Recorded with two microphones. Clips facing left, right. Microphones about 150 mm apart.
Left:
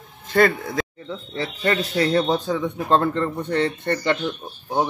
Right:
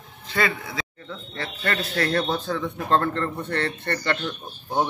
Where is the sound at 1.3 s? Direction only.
15° left (ahead or behind).